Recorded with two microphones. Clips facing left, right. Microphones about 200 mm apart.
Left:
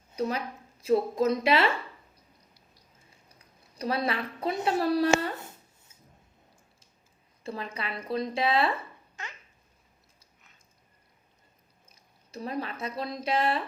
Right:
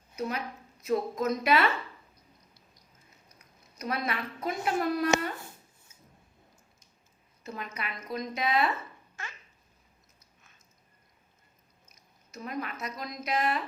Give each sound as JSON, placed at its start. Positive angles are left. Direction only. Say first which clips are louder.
{"t": 0.2, "sound": "speech", "louder": "left 3 dB", "side_deg": 30}
{"t": 2.7, "sound": "a sound", "louder": "left 1 dB", "side_deg": 30}
{"t": 7.4, "sound": "a woman's voice", "louder": "left 3 dB", "side_deg": 30}
{"t": 9.2, "sound": "babbling", "louder": "left 1 dB", "side_deg": 20}
{"t": 11.9, "sound": "speech", "louder": "left 5 dB", "side_deg": 30}